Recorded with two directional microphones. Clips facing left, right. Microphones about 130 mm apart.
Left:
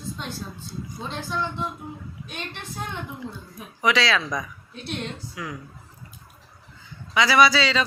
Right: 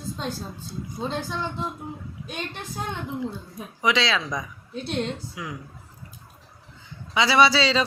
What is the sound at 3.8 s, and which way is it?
A woman's voice, 20° right (ahead or behind).